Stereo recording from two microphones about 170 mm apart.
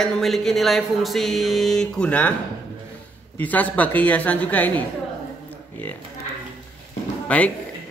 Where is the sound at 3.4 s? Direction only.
10° left (ahead or behind).